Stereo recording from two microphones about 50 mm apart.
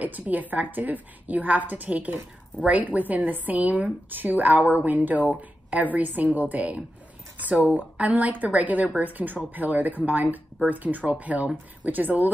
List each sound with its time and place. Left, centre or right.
0.0 s speech: right